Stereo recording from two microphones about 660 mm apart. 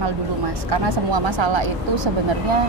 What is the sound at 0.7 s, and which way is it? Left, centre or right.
Speech, right.